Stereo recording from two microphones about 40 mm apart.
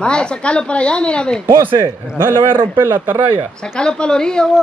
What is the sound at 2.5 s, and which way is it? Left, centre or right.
Speech, right.